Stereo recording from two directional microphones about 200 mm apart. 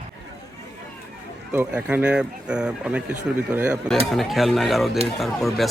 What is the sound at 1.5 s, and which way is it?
Speech, 5° right (ahead or behind).